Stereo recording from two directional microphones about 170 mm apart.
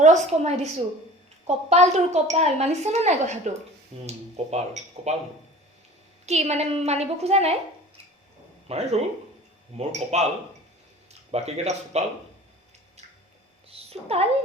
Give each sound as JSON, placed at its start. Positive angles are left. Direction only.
{"t": 0.0, "sound": "a woman's voice", "side_deg": -45}
{"t": 6.2, "sound": "a woman's voice", "side_deg": -40}
{"t": 8.6, "sound": "a woman's voice", "side_deg": -40}
{"t": 13.7, "sound": "a sound", "side_deg": -35}